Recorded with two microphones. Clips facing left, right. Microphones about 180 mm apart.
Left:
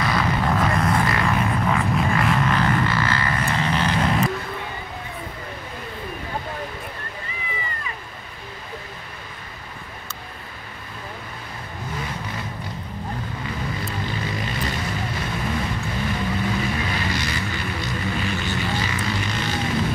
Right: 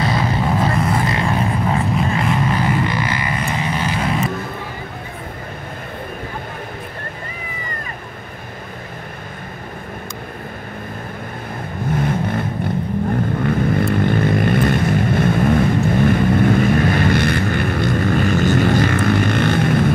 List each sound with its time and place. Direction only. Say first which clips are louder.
0.0 s vehicle: right 3 dB; 30° right (ahead or behind)
2.1 s vehicle: right 2 dB; 10° right (ahead or behind)
11.9 s vehicle: right 12 dB; 55° right (ahead or behind)